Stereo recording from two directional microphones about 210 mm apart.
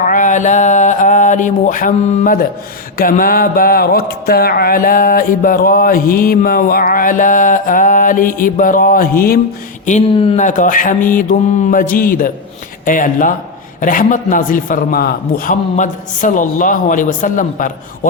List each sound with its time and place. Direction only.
0.1 s a sound: 40° left (ahead or behind)
3.0 s speech: 40° left (ahead or behind)
9.8 s a man's voice: 30° left (ahead or behind)